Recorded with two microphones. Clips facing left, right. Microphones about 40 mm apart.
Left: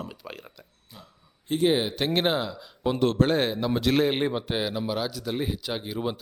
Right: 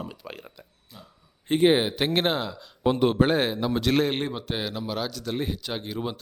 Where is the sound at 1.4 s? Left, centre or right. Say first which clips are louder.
Right 3 dB; right.